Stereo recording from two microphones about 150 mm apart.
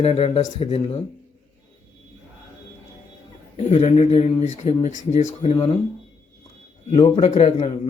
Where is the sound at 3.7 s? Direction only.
50° left (ahead or behind).